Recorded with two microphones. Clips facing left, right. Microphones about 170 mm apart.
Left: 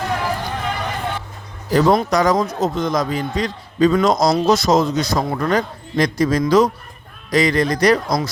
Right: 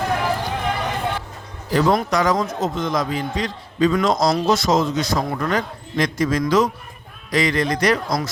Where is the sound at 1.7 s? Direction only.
35° left (ahead or behind).